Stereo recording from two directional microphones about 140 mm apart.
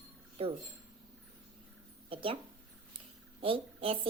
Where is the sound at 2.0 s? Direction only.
40° right (ahead or behind).